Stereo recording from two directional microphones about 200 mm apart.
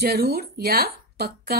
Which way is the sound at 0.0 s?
50° right (ahead or behind).